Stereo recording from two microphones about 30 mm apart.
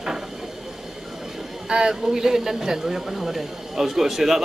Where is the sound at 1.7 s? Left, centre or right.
Right.